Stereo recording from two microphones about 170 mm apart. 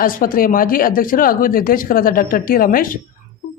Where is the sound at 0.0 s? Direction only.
55° left (ahead or behind).